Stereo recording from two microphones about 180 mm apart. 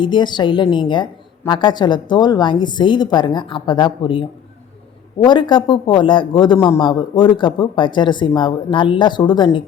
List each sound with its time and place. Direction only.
0.0 s a man's voice: 25° left (ahead or behind)